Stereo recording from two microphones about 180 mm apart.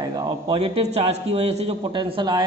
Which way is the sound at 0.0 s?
20° right (ahead or behind).